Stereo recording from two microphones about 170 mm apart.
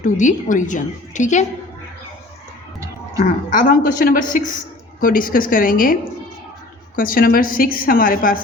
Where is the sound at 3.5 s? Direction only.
50° left (ahead or behind).